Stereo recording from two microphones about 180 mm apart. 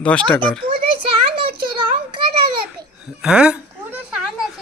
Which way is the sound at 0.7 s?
30° right (ahead or behind).